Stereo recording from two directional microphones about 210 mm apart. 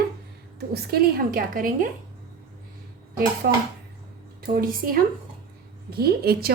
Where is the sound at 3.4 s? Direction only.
50° right (ahead or behind).